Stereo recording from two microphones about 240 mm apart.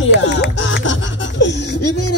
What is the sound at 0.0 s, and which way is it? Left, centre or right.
Music, left.